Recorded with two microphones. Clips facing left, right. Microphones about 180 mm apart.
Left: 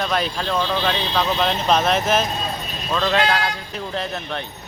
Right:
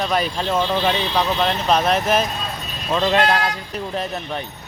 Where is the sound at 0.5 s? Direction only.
20° right (ahead or behind).